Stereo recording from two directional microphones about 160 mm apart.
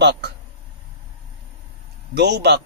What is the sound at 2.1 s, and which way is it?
Speech, 90° right.